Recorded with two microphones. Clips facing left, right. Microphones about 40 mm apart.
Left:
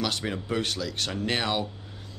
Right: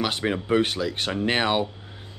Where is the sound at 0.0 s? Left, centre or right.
Right.